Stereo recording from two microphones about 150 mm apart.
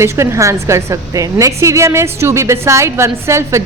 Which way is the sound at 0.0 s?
20° right (ahead or behind).